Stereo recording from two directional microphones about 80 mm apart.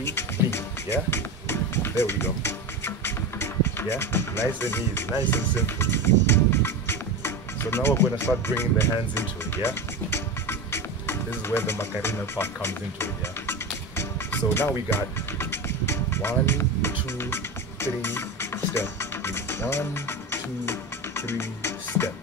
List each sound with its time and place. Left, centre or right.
0.0 s music: left